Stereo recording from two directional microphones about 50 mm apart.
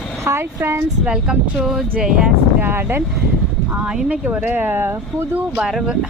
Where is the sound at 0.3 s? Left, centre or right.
Right.